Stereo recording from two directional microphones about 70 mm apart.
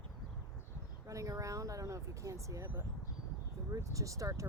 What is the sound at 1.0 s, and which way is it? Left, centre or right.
Speech, right.